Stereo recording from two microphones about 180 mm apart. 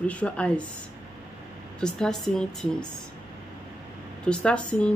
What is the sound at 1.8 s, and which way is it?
A woman's voice, 5° left (ahead or behind).